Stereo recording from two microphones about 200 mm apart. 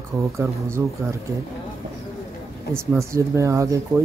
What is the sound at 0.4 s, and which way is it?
Speech, 15° right (ahead or behind).